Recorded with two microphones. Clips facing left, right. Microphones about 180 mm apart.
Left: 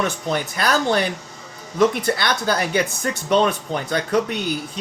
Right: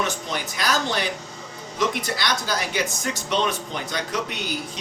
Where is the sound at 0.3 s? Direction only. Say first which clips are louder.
Left 5 dB; 55° left (ahead or behind).